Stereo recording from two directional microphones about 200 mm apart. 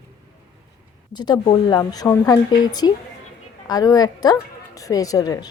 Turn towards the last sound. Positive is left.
turn(degrees=20)  # may be behind; listen again after turning